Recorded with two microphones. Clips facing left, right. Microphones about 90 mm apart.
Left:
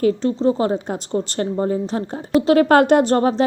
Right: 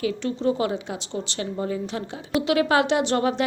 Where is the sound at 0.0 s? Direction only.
40° left (ahead or behind).